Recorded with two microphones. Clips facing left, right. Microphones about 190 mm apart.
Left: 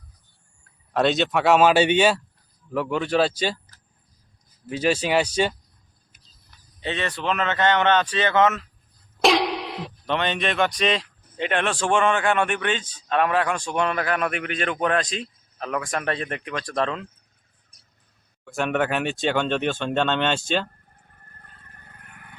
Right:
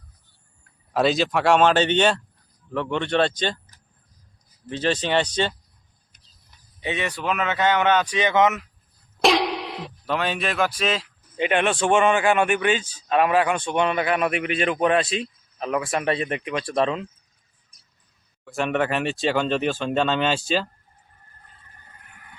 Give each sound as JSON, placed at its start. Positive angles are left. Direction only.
{"t": 0.9, "sound": "speech", "side_deg": 0}
{"t": 4.6, "sound": "speech", "side_deg": 10}
{"t": 6.7, "sound": "speech", "side_deg": -10}
{"t": 9.2, "sound": "speech", "side_deg": 0}
{"t": 18.4, "sound": "speech", "side_deg": 0}
{"t": 21.2, "sound": "vehicle", "side_deg": 60}